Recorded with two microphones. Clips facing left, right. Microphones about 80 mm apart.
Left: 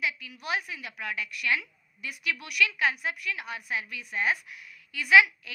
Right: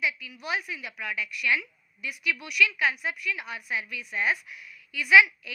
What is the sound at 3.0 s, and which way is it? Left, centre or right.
A woman's voice, left.